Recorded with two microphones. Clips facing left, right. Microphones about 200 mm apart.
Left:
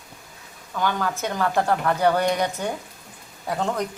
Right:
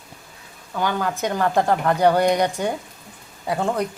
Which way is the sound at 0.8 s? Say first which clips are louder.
Right 2 dB; 15° right (ahead or behind).